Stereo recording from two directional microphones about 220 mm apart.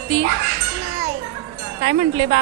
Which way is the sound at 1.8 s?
25° right (ahead or behind).